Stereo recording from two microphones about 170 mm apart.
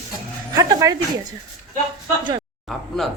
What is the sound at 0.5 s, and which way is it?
Speech, 20° right (ahead or behind).